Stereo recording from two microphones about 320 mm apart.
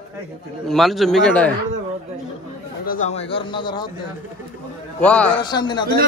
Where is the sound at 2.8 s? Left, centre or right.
Left.